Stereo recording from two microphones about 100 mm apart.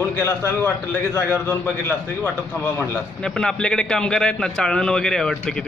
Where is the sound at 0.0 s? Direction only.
25° left (ahead or behind).